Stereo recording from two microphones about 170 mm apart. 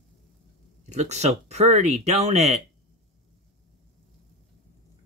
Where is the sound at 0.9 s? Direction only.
40° right (ahead or behind).